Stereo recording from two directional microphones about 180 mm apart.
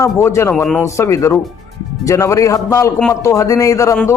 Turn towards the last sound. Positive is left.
turn(degrees=15)  # may be behind; listen again after turning